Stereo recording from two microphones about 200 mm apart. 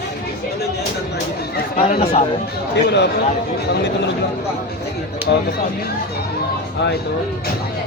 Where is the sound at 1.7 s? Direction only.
45° left (ahead or behind).